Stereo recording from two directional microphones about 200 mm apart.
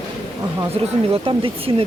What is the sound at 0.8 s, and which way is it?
Speech, 30° right (ahead or behind).